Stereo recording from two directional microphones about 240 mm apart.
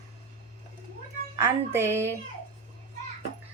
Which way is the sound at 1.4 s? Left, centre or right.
Centre.